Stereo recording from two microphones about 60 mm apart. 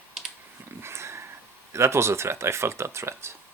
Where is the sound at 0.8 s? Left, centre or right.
Right.